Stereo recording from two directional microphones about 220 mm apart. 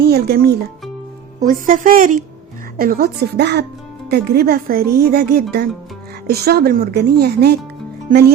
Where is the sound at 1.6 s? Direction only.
40° right (ahead or behind).